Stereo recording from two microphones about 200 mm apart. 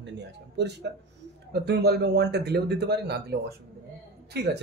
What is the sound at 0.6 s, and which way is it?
Speech, 60° right (ahead or behind).